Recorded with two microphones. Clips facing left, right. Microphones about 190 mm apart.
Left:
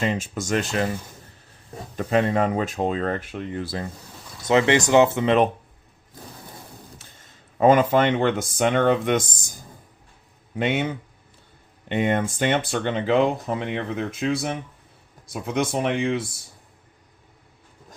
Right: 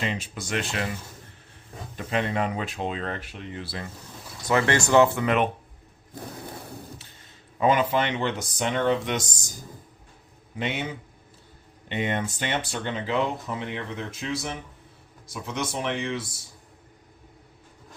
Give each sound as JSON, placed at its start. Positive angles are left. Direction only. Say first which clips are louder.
{"t": 0.0, "sound": "speech", "louder": "left 6 dB", "side_deg": 45}
{"t": 2.0, "sound": "speech", "louder": "left 6 dB", "side_deg": 40}
{"t": 4.4, "sound": "speech", "louder": "left 4 dB", "side_deg": 20}
{"t": 7.6, "sound": "speech", "louder": "left 6 dB", "side_deg": 45}
{"t": 10.6, "sound": "speech", "louder": "left 6 dB", "side_deg": 55}
{"t": 11.9, "sound": "speech", "louder": "left 6 dB", "side_deg": 50}
{"t": 15.3, "sound": "speech", "louder": "left 7 dB", "side_deg": 60}